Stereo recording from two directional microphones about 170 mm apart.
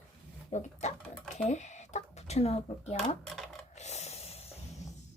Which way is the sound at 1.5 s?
45° left (ahead or behind).